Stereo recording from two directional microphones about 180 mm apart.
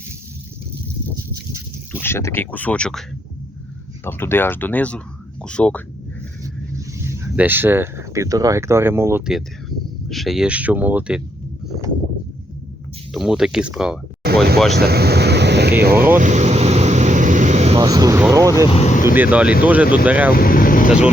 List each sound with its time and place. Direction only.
1.9 s speech: 10° left (ahead or behind)
4.0 s speech: 10° left (ahead or behind)
6.4 s a sound: 15° right (ahead or behind)
9.2 s speech: centre (ahead or behind)
13.1 s speech: centre (ahead or behind)
14.2 s a sound: 60° right (ahead or behind)
14.8 s speech: 60° right (ahead or behind)
16.1 s vehicle: 40° right (ahead or behind)
17.7 s speech: 20° right (ahead or behind)
18.7 s vehicle: 40° left (ahead or behind)
19.0 s speech: 10° right (ahead or behind)
20.3 s speech: 55° left (ahead or behind)